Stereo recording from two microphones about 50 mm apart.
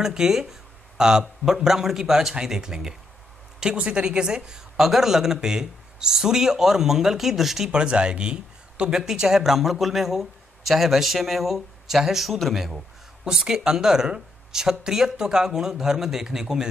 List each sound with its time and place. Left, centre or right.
0.0 s speech: centre
3.7 s speech: right; by 7.7 s centre
7.7 s speech: right